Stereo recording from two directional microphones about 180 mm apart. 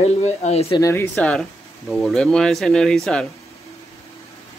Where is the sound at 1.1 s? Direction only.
5° left (ahead or behind).